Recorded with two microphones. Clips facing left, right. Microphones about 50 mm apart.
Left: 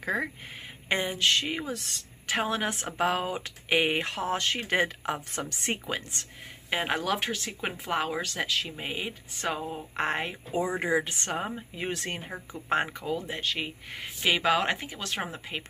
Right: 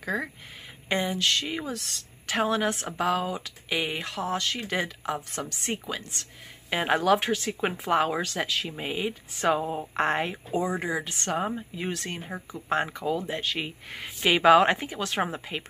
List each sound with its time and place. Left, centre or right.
0.0 s speech: centre
6.7 s speech: centre
9.4 s speech: centre
9.9 s speech: centre
10.8 s speech: centre
12.3 s speech: centre
12.6 s speech: centre
13.1 s speech: centre